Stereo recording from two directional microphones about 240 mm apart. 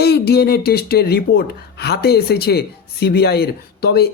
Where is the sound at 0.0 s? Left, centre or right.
Left.